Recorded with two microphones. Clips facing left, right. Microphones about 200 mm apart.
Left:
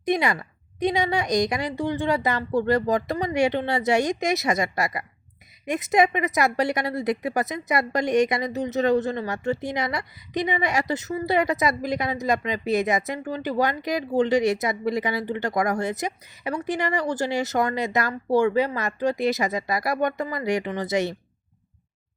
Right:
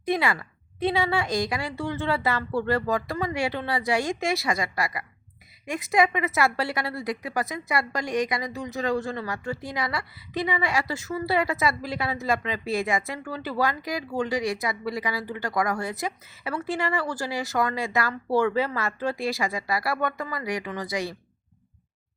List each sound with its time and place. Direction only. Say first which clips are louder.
0.1 s a woman's voice: left 2 dB; 20° left (ahead or behind)